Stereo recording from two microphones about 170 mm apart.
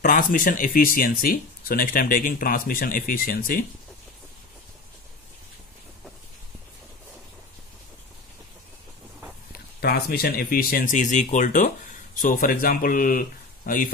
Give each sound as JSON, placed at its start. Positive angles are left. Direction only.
{"t": 0.0, "sound": "speech", "side_deg": 55}
{"t": 9.8, "sound": "speech", "side_deg": 65}